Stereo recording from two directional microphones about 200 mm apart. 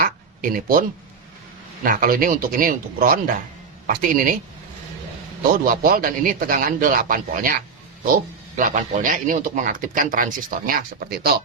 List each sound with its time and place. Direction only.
0.0 s a sound: 45° right (ahead or behind)
1.8 s a man's voice: 45° right (ahead or behind)
5.6 s a man's voice: 45° right (ahead or behind)